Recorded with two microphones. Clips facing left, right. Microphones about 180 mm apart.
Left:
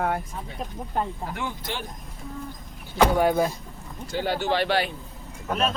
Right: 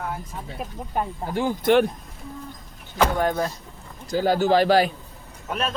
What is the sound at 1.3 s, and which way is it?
Speech, 35° right (ahead or behind).